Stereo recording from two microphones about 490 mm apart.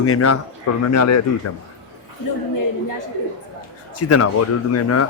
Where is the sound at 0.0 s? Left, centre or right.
Left.